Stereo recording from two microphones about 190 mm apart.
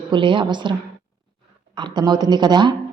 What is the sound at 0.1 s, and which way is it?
A woman's voice, 25° right (ahead or behind).